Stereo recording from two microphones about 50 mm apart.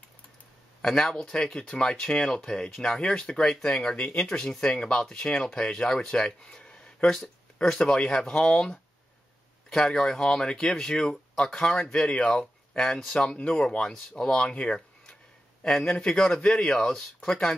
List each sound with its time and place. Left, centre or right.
0.8 s speech: centre
12.8 s speech: centre
14.5 s speech: left
15.6 s speech: centre